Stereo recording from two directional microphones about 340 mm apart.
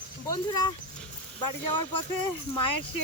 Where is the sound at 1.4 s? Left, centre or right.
Left.